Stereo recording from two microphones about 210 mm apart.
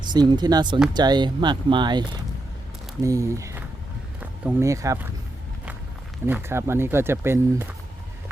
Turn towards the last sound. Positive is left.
turn(degrees=-10)  # may be behind; listen again after turning